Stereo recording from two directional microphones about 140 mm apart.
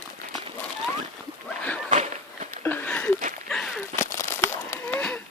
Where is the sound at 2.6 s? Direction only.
15° left (ahead or behind).